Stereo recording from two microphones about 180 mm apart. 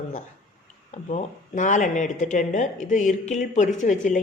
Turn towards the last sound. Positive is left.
turn(degrees=45)  # may be behind; listen again after turning